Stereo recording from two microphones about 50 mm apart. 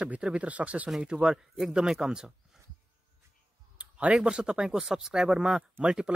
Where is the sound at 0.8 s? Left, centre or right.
Centre.